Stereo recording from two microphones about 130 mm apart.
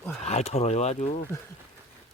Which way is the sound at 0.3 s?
55° left (ahead or behind).